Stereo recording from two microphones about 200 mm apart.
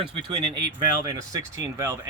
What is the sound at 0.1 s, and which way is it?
Speech, 25° right (ahead or behind).